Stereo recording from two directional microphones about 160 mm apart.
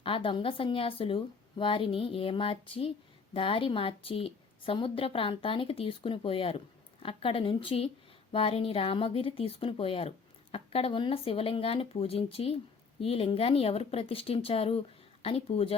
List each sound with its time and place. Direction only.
0.0 s a woman's voice: 35° left (ahead or behind)